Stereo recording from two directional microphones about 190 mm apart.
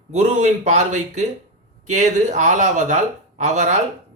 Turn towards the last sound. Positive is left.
turn(degrees=-40)  # may be behind; listen again after turning